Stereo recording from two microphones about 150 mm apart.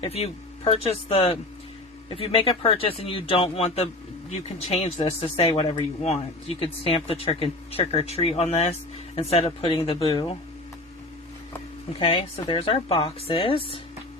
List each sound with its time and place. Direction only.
0.0 s speech: 45° left (ahead or behind)
11.9 s speech: 35° left (ahead or behind)